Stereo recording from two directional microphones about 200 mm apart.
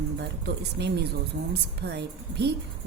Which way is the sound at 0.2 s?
55° right (ahead or behind).